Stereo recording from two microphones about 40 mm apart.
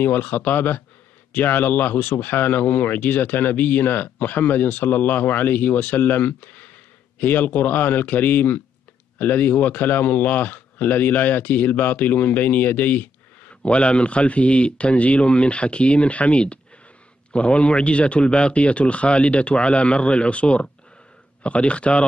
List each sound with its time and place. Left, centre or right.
0.0 s speech: left
13.6 s speech: left